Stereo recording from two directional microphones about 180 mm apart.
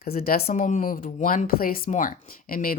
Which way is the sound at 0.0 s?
55° left (ahead or behind).